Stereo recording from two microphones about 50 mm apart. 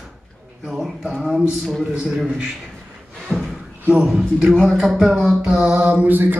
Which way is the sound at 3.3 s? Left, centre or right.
Centre.